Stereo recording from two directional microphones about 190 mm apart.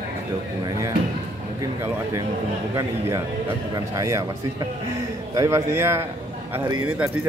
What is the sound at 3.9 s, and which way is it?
A man's voice, 15° right (ahead or behind).